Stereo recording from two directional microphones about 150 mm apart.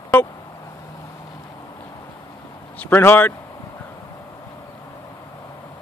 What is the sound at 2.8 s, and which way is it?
Speech, 15° left (ahead or behind).